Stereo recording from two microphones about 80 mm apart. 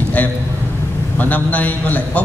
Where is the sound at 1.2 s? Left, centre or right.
Left.